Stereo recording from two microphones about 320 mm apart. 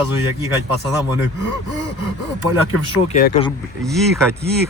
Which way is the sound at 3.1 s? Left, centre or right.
Centre.